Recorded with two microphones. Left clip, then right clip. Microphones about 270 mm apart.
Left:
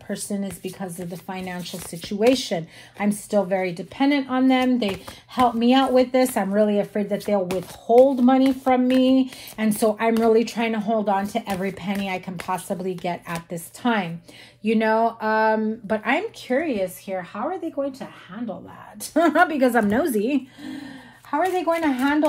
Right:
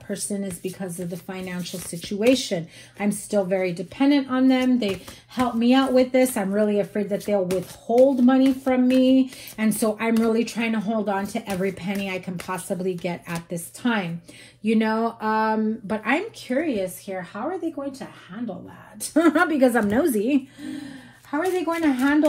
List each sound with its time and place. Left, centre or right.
0.1 s speech: left
19.1 s speech: left